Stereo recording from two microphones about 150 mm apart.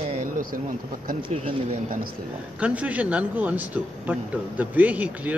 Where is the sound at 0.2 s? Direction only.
70° right (ahead or behind).